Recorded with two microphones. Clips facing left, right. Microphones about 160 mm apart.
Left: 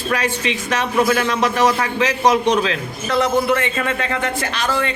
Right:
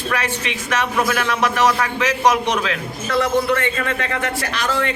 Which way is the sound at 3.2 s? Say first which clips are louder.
Left 1 dB; 20° left (ahead or behind).